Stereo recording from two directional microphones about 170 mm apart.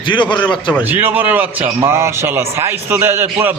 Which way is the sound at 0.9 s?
10° right (ahead or behind).